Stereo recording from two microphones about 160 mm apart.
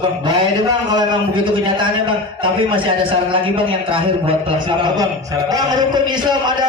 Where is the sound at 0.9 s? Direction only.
30° right (ahead or behind).